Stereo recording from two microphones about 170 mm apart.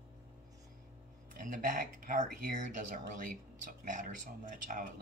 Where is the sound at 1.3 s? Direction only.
50° right (ahead or behind).